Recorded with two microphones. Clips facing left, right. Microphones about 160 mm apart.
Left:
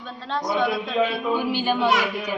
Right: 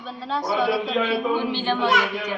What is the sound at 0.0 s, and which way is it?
A child's voice, 5° right (ahead or behind).